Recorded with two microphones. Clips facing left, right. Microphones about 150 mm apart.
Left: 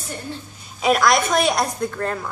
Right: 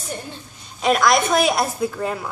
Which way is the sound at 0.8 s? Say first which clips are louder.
Even; centre (ahead or behind).